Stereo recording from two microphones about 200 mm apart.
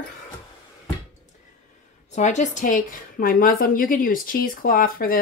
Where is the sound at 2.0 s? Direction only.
35° left (ahead or behind).